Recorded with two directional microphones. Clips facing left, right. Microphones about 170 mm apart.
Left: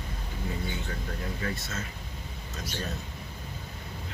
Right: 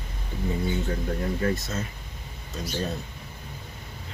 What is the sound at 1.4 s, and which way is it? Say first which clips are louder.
Speech: right 7 dB; 40° right (ahead or behind).